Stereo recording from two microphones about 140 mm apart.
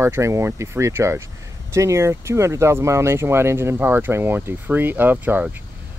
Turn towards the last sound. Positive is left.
turn(degrees=-15)  # may be behind; listen again after turning